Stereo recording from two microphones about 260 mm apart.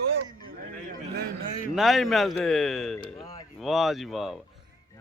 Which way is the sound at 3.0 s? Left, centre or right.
Left.